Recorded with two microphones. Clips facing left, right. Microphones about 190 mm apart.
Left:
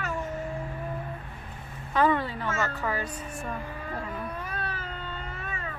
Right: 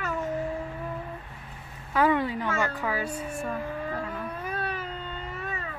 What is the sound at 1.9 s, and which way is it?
A woman's voice, 10° right (ahead or behind).